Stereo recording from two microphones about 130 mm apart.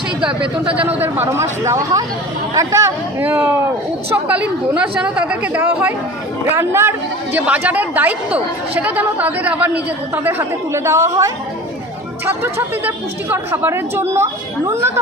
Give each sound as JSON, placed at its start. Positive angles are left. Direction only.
{"t": 0.8, "sound": "speech", "side_deg": -15}
{"t": 7.3, "sound": "speech", "side_deg": -10}